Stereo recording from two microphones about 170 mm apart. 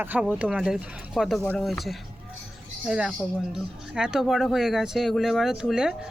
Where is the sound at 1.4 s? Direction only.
10° left (ahead or behind).